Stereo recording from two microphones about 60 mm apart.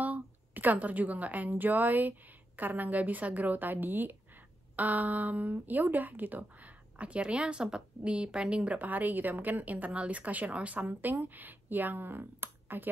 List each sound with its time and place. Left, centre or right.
0.0 s a woman's voice: right